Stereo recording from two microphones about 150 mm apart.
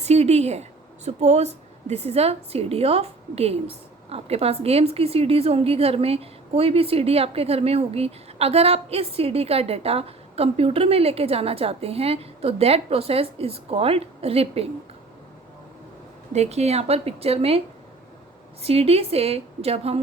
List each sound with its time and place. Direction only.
0.0 s a woman's voice: 45° right (ahead or behind)
16.3 s a woman's voice: 45° right (ahead or behind)
18.6 s a woman's voice: 40° right (ahead or behind)